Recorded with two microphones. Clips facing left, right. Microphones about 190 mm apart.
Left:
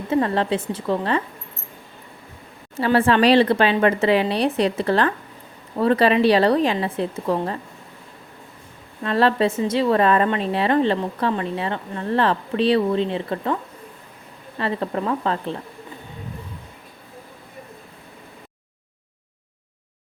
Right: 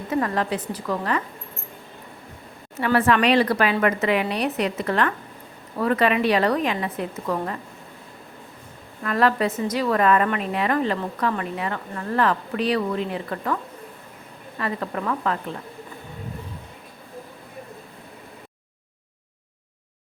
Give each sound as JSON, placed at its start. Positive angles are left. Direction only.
{"t": 0.1, "sound": "a woman's voice", "side_deg": 25}
{"t": 2.7, "sound": "a woman's voice", "side_deg": 30}
{"t": 9.0, "sound": "a woman's voice", "side_deg": 30}
{"t": 14.6, "sound": "a woman's voice", "side_deg": 30}